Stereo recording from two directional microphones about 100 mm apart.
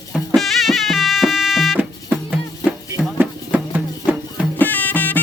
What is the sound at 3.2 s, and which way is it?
Music, 15° right (ahead or behind).